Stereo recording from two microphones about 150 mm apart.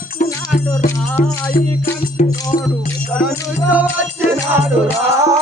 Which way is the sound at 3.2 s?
10° right (ahead or behind).